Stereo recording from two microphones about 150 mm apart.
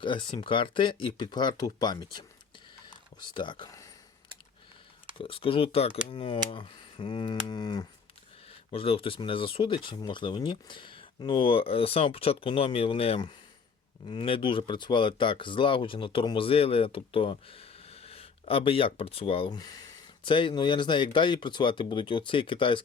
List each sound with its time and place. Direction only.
0.0 s speech: 35° left (ahead or behind)
5.1 s speech: 35° left (ahead or behind)
8.7 s speech: 40° left (ahead or behind)
19.5 s speech: 25° left (ahead or behind)